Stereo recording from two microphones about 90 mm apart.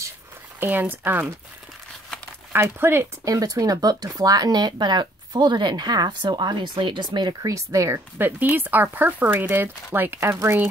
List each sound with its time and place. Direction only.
0.6 s speech: 20° right (ahead or behind)
2.5 s speech: 25° right (ahead or behind)
3.3 s speech: 40° right (ahead or behind)
7.5 s speech: 35° right (ahead or behind)
8.2 s speech: 20° right (ahead or behind)